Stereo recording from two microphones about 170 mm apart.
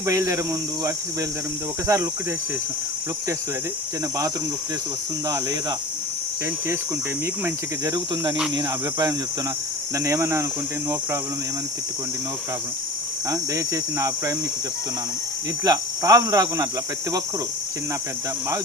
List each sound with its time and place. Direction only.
0.0 s speech: 20° right (ahead or behind)
1.9 s cricket: 20° right (ahead or behind)
7.4 s cricket: 20° right (ahead or behind)
9.9 s speech: 20° right (ahead or behind)
13.3 s cricket: 20° right (ahead or behind)
15.6 s cricket: 20° right (ahead or behind)